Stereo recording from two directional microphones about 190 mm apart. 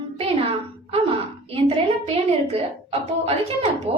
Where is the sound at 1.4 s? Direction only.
30° right (ahead or behind).